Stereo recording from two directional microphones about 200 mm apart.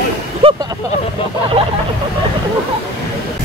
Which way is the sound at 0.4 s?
30° right (ahead or behind).